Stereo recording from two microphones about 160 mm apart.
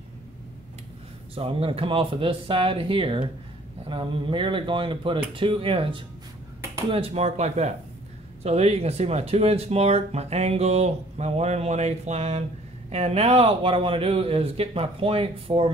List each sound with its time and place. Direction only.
1.3 s speech: 35° right (ahead or behind)